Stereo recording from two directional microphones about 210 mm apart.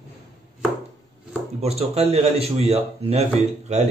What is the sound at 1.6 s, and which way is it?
Speech, 30° right (ahead or behind).